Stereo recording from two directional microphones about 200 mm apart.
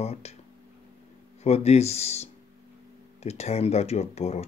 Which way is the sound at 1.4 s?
30° left (ahead or behind).